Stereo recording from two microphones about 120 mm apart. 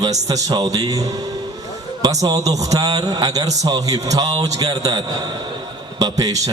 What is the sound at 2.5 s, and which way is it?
A man's voice, 30° right (ahead or behind).